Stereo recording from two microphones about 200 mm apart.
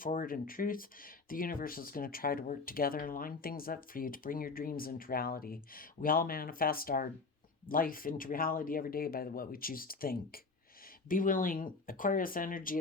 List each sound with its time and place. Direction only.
0.0 s speech: 45° left (ahead or behind)